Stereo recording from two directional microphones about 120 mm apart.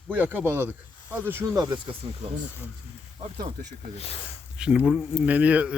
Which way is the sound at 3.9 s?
55° left (ahead or behind).